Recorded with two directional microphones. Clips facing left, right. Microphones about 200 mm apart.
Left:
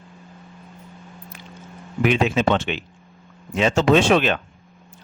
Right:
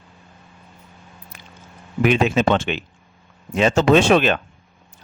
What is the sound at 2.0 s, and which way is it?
Speech, 50° right (ahead or behind).